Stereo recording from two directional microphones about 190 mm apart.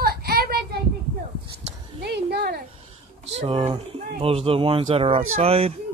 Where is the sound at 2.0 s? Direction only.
60° right (ahead or behind).